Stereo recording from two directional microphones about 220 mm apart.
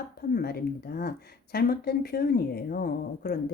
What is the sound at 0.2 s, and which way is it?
Speech, 45° left (ahead or behind).